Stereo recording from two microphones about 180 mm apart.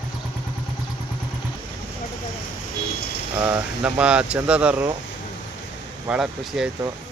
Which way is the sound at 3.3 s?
10° right (ahead or behind).